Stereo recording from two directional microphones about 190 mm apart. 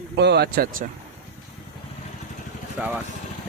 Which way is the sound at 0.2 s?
60° right (ahead or behind).